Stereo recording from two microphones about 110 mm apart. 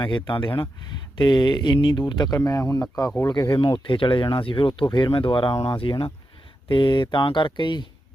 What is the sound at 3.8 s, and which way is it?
Speech, 50° left (ahead or behind).